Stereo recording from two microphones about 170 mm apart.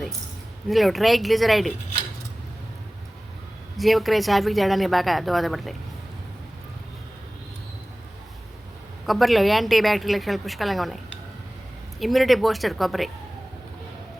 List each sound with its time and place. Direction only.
0.7 s a woman's voice: centre (ahead or behind)
3.8 s a woman's voice: centre (ahead or behind)
9.0 s a woman's voice: centre (ahead or behind)